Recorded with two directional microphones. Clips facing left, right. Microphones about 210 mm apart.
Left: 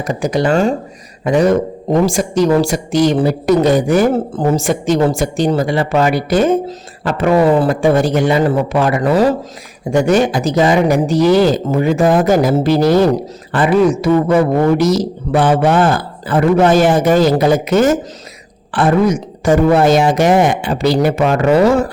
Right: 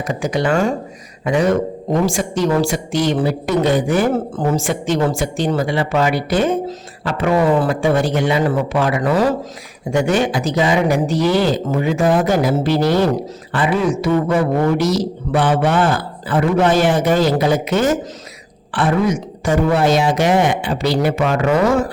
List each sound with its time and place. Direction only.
0.0 s a woman's voice: 40° left (ahead or behind)